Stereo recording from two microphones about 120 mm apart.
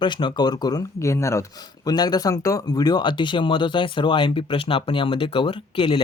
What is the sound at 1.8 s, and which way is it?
Speech, 35° left (ahead or behind).